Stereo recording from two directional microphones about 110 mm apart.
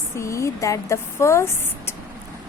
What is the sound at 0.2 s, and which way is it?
A woman's voice, 25° left (ahead or behind).